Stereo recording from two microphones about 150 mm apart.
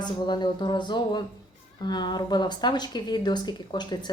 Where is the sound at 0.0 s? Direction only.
30° left (ahead or behind).